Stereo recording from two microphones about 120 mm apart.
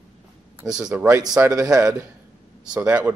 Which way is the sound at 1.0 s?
25° right (ahead or behind).